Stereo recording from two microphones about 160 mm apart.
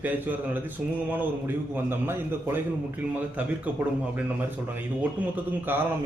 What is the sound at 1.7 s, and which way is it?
Speech, 15° right (ahead or behind).